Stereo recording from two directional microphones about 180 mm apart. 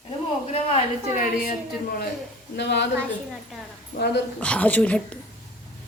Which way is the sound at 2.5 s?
70° left (ahead or behind).